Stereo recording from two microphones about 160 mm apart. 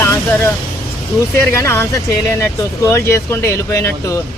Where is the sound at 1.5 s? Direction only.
15° left (ahead or behind).